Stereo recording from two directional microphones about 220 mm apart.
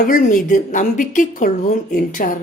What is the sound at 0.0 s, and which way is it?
A woman's voice, 35° left (ahead or behind).